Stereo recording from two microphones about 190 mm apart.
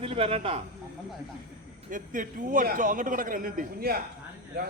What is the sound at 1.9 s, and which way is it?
A man's voice, 45° right (ahead or behind).